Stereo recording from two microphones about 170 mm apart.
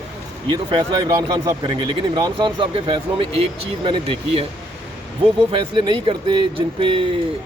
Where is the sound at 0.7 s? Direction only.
25° right (ahead or behind).